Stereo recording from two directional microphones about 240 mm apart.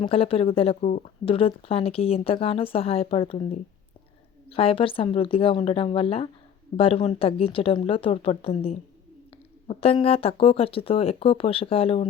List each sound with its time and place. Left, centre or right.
0.0 s speech: left